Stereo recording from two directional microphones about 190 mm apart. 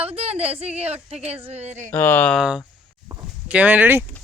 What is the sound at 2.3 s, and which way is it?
Speech, 5° right (ahead or behind).